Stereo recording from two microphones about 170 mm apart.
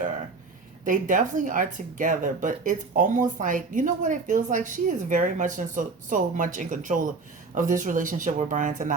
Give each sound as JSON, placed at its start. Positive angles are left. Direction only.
{"t": 0.9, "sound": "a woman's voice", "side_deg": -50}